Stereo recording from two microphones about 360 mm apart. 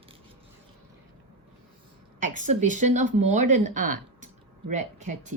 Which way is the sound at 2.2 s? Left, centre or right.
Centre.